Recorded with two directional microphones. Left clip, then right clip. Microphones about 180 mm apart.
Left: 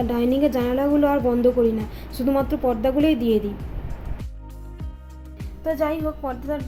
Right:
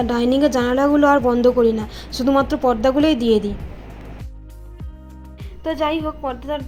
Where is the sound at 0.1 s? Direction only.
15° right (ahead or behind).